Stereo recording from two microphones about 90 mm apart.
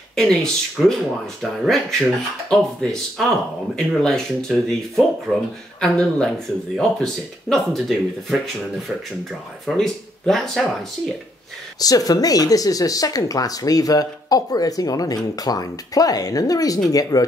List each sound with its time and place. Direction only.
0.1 s speech: 5° left (ahead or behind)
5.3 s speech: 5° right (ahead or behind)
5.8 s speech: 10° left (ahead or behind)
9.7 s speech: 5° left (ahead or behind)
11.8 s speech: 45° left (ahead or behind)